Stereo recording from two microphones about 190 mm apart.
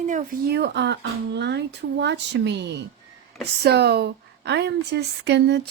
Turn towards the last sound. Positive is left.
turn(degrees=-65)  # may be behind; listen again after turning